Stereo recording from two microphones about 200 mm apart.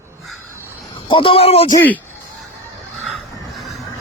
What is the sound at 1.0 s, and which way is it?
Speech, 25° left (ahead or behind).